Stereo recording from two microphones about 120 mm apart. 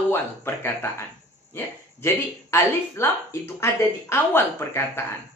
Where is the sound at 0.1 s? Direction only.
20° left (ahead or behind).